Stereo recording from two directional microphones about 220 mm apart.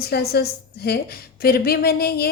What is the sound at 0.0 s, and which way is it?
A woman's voice, 45° left (ahead or behind).